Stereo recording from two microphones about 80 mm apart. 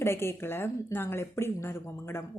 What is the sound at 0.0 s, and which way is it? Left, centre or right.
Speech, left.